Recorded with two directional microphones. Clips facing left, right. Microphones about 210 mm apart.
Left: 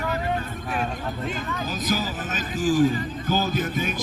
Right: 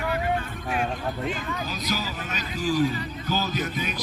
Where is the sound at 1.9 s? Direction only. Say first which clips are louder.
Left 5 dB; 50° left (ahead or behind).